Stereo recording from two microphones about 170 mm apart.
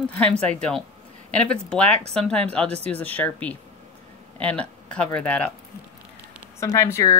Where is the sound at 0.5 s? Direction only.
5° left (ahead or behind).